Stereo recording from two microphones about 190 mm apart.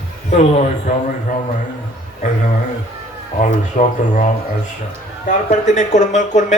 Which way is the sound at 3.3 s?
40° left (ahead or behind).